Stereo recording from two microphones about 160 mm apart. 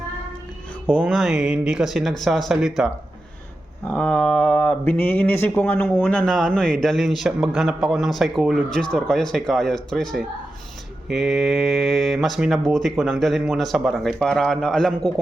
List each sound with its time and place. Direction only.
0.9 s speech: 5° right (ahead or behind)
3.8 s speech: 10° left (ahead or behind)